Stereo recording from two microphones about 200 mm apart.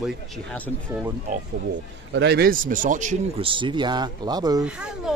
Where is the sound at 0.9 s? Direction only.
10° right (ahead or behind).